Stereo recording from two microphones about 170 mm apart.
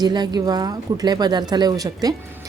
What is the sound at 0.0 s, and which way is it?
A woman's voice, 25° right (ahead or behind).